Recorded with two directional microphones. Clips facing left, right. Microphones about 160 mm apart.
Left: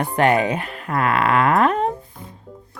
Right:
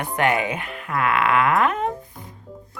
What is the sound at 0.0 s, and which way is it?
Speech, 35° left (ahead or behind).